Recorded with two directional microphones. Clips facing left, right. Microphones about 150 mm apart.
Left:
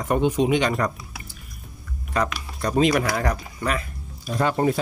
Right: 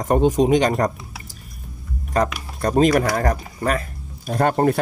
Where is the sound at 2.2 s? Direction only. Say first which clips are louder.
Right 4 dB; 45° right (ahead or behind).